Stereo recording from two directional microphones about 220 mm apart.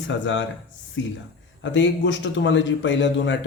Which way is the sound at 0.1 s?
55° left (ahead or behind).